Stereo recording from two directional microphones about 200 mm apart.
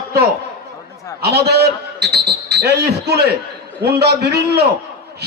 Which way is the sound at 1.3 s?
55° right (ahead or behind).